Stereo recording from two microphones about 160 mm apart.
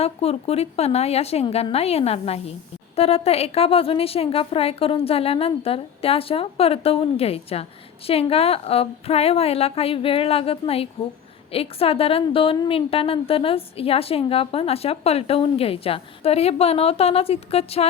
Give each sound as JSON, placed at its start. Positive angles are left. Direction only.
{"t": 0.0, "sound": "a woman's voice", "side_deg": 40}